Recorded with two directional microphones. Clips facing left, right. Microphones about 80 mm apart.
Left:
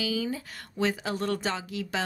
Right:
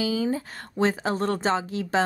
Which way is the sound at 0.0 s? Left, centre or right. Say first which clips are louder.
Right 5 dB; right.